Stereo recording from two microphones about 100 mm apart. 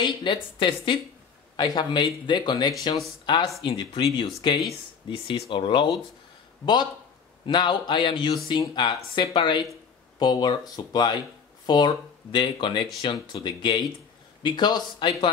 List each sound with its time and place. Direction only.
0.0 s speech: 55° left (ahead or behind)
1.6 s speech: 45° left (ahead or behind); by 5.9 s 60° left (ahead or behind)
6.6 s speech: 50° left (ahead or behind)